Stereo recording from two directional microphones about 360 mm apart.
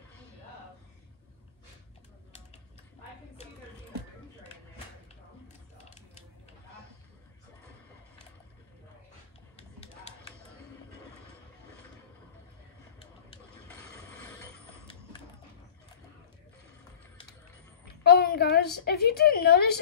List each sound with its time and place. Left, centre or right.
9.6 s a sound: centre
13.7 s mechanisms: centre
18.0 s a woman's voice: left